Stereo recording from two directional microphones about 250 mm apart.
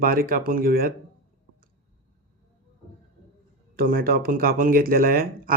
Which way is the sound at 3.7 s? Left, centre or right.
Right.